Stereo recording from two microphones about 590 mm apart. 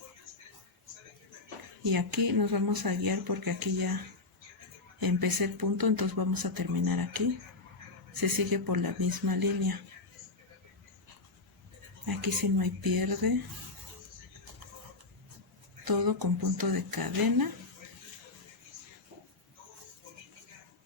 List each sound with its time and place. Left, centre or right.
1.8 s speech: right
8.2 s speech: right
12.0 s speech: right
15.8 s speech: right